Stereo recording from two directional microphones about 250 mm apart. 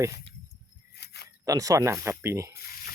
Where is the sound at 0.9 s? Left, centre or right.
Left.